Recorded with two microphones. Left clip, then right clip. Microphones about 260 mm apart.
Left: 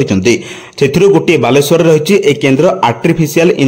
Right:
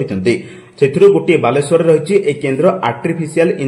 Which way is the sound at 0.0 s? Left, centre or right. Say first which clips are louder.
Left 5 dB; left.